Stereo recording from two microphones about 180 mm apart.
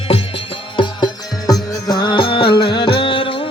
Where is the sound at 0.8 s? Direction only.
25° left (ahead or behind).